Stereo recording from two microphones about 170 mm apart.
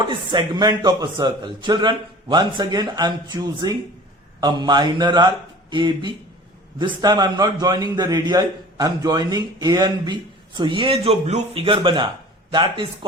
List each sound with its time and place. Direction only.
0.1 s a man's voice: 25° right (ahead or behind)